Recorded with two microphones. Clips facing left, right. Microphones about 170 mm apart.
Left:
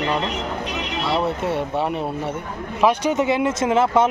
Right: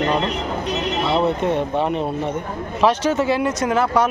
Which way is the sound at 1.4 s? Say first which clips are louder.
Right 3 dB; 10° left (ahead or behind).